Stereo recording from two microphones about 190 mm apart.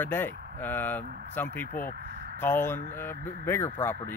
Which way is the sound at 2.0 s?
55° right (ahead or behind).